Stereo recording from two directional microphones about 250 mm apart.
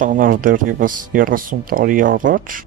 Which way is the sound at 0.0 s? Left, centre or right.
Right.